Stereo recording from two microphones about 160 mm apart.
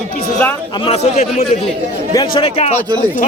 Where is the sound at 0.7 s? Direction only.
35° left (ahead or behind).